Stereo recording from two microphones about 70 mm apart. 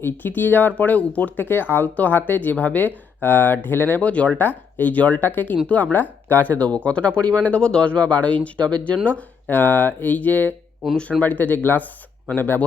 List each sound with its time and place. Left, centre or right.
0.0 s speech: left